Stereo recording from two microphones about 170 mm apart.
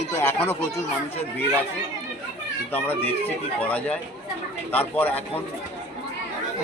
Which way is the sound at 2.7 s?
10° left (ahead or behind).